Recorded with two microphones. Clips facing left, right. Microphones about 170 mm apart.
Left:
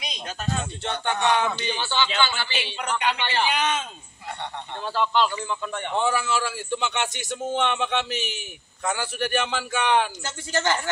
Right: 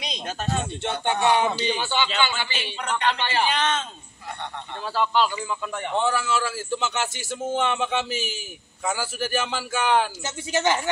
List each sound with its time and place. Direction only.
0.6 s a man's voice: 10° right (ahead or behind)
2.5 s a man's voice: centre (ahead or behind)
4.9 s a man's voice: 5° right (ahead or behind)
10.2 s a man's voice: 15° right (ahead or behind)